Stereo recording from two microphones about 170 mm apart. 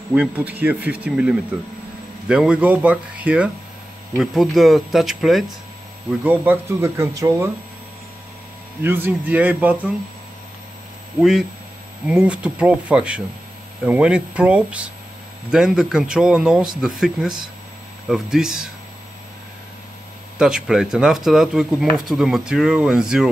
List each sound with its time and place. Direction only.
0.1 s speech: 10° right (ahead or behind)
6.2 s speech: 10° right (ahead or behind)
8.8 s speech: 10° right (ahead or behind)
11.1 s speech: centre (ahead or behind)
20.3 s speech: 5° right (ahead or behind)